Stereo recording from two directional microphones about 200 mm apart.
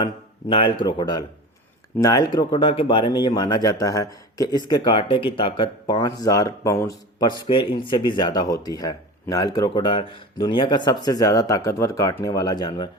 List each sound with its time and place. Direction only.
0.0 s speech: 25° left (ahead or behind)